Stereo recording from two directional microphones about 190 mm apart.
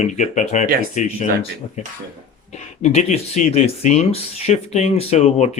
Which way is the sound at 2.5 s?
40° left (ahead or behind).